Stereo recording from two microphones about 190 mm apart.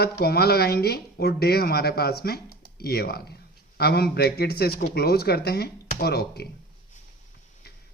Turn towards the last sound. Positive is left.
turn(degrees=55)  # may be behind; listen again after turning